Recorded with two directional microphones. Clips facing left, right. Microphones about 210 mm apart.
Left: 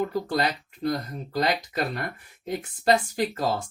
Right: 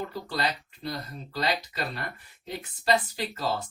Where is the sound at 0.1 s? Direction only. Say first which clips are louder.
Left 5 dB; 50° left (ahead or behind).